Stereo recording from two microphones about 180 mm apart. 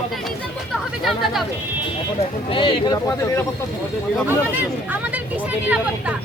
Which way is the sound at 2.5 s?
25° left (ahead or behind).